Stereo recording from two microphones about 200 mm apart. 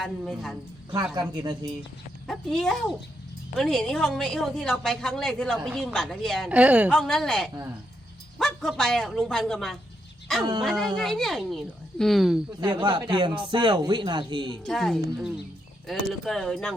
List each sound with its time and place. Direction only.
0.0 s a woman's voice: centre (ahead or behind)
1.1 s speech: 20° right (ahead or behind)
2.2 s a woman's voice: centre (ahead or behind)
12.5 s speech: 20° right (ahead or behind)
14.6 s a woman's voice: centre (ahead or behind)